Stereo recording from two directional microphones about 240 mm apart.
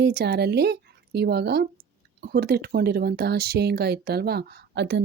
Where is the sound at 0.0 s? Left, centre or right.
Right.